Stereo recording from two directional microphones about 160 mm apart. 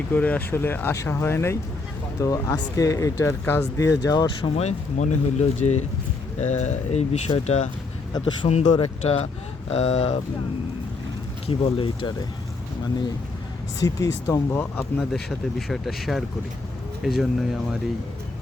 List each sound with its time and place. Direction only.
0.1 s speech: 10° left (ahead or behind)
4.5 s speech: 45° left (ahead or behind)
8.6 s speech: 25° left (ahead or behind)
9.6 s speech: 40° left (ahead or behind)
11.4 s speech: 30° left (ahead or behind)
13.8 s speech: 25° left (ahead or behind); by 17.7 s centre (ahead or behind)